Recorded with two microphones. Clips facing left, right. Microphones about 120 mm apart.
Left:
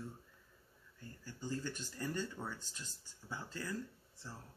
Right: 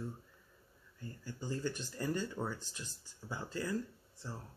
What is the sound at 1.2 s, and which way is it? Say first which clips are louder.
Speech: right 3 dB; 15° right (ahead or behind).